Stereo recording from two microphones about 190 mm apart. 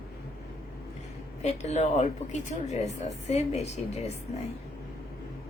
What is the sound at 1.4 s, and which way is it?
A woman's voice, 35° left (ahead or behind).